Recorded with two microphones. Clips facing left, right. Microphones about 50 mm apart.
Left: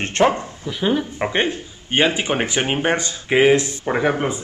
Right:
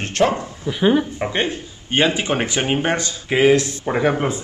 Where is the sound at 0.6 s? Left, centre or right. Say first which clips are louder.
Right 4 dB; centre.